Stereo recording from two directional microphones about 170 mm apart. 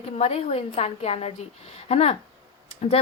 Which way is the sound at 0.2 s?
40° left (ahead or behind).